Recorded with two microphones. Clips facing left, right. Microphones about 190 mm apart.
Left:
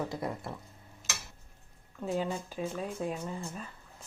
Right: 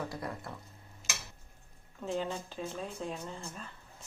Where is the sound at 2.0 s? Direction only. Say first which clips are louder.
Left 2 dB; 5° left (ahead or behind).